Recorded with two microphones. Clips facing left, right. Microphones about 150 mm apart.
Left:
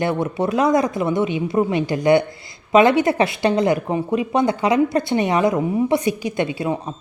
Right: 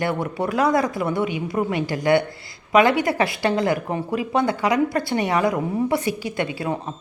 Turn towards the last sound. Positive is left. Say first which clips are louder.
# left 3 dB
turn(degrees=20)  # may be behind; listen again after turning